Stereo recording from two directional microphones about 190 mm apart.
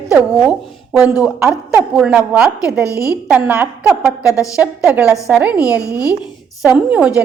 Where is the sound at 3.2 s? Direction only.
10° right (ahead or behind).